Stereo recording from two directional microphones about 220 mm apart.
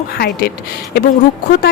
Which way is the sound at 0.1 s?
45° left (ahead or behind).